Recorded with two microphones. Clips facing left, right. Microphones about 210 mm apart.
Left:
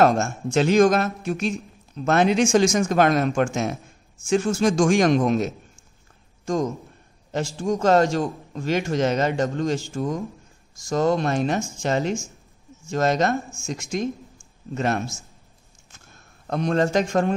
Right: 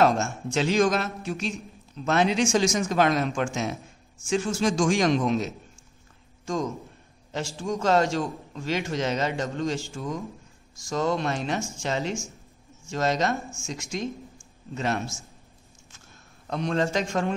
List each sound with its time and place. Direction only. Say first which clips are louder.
0.0 s a man's voice: left 3 dB; 50° left (ahead or behind)
7.3 s a man's voice: left 5 dB; 50° left (ahead or behind)
16.4 s a man's voice: left 4 dB; 50° left (ahead or behind)